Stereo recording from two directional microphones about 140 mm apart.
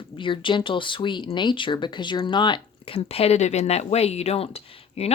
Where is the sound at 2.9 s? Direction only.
50° left (ahead or behind).